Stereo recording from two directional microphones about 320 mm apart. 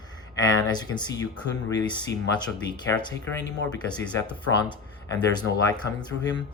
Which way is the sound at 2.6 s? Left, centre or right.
Centre.